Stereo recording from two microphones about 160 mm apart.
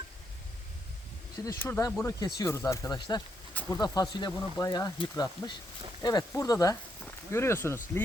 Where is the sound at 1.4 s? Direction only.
15° left (ahead or behind).